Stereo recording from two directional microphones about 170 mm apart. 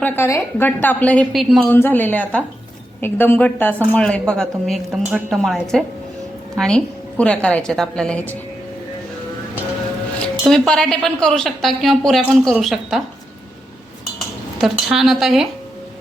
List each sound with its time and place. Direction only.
0.0 s speech: 15° left (ahead or behind)
1.7 s a woman's voice: 10° left (ahead or behind)
10.2 s a woman's voice: 5° left (ahead or behind)
14.6 s a woman's voice: centre (ahead or behind)